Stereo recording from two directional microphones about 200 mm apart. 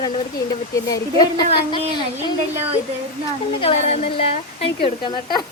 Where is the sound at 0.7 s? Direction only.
15° left (ahead or behind).